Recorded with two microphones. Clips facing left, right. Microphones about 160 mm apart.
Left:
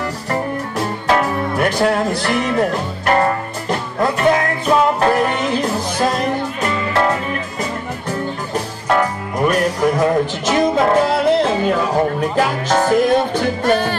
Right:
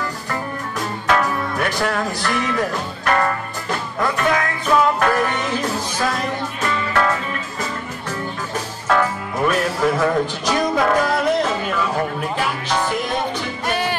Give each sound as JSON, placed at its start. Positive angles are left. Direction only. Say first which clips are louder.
{"t": 0.3, "sound": "music", "louder": "left 8 dB", "side_deg": 30}
{"t": 8.8, "sound": "music", "louder": "left 1 dB", "side_deg": 15}
{"t": 12.4, "sound": "music", "louder": "left 6 dB", "side_deg": 45}